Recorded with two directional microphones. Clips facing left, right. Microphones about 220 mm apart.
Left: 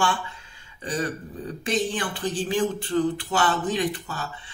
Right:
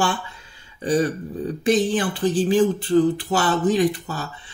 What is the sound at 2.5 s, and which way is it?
Speech, 35° right (ahead or behind).